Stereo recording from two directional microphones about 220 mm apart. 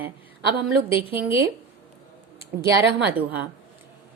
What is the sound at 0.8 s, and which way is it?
Speech, 25° left (ahead or behind).